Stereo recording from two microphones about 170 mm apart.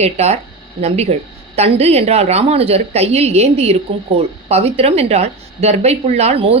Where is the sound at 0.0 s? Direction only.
40° right (ahead or behind).